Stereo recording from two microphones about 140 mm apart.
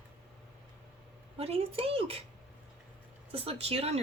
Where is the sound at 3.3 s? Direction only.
45° right (ahead or behind).